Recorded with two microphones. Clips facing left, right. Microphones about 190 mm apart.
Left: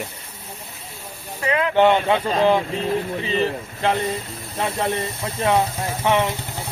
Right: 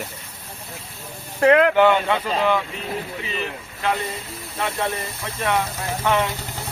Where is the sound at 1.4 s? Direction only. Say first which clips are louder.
Right 7 dB; 60° right (ahead or behind).